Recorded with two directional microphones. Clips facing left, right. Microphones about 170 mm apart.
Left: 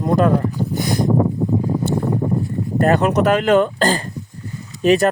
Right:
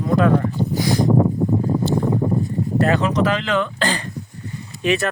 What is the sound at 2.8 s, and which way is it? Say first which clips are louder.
Speech: left 4 dB; 60° left (ahead or behind).